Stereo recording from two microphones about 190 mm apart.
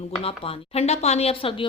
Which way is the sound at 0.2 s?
30° left (ahead or behind).